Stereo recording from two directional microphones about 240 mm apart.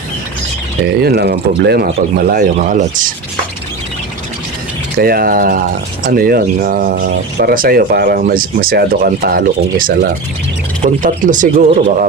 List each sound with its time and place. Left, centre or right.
1.0 s speech: right
4.9 s speech: right